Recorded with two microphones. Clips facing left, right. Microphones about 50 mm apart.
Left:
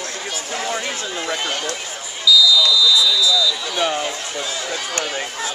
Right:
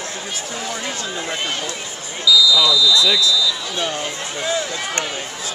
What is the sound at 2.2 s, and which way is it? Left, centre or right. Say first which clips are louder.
Basketball bounce: even; centre.